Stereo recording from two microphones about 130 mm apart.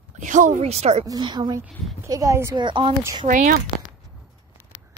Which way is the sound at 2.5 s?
35° right (ahead or behind).